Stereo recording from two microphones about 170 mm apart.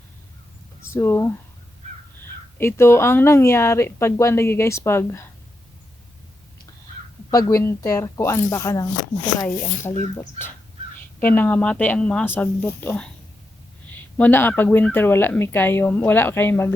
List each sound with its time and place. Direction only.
0.9 s speech: 15° left (ahead or behind)
2.6 s speech: 15° left (ahead or behind)
7.3 s speech: 20° left (ahead or behind)
10.2 s speech: 15° left (ahead or behind)